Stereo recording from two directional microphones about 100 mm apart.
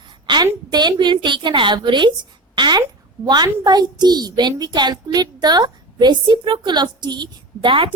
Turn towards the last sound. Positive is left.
turn(degrees=-60)  # may be behind; listen again after turning